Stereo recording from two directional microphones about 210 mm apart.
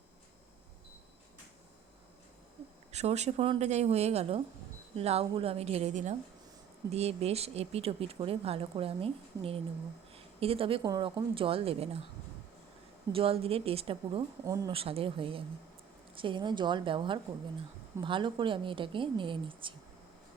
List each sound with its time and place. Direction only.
2.9 s speech: 30° right (ahead or behind)
13.1 s speech: 25° right (ahead or behind)
14.4 s speech: 15° right (ahead or behind)
14.7 s speech: 25° right (ahead or behind)